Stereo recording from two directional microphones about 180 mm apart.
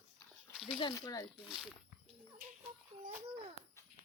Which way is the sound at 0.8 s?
20° left (ahead or behind).